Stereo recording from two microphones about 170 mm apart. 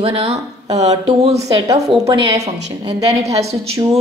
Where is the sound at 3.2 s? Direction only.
35° right (ahead or behind).